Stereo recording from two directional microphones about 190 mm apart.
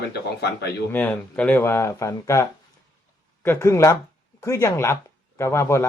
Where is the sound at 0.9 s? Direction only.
10° left (ahead or behind).